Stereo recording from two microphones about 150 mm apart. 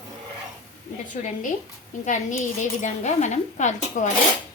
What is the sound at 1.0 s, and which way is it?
A woman's voice, 60° left (ahead or behind).